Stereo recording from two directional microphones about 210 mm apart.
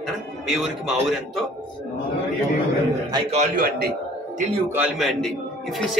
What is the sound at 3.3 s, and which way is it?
Speech, 45° right (ahead or behind).